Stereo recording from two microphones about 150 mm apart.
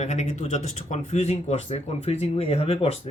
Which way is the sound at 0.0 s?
50° left (ahead or behind).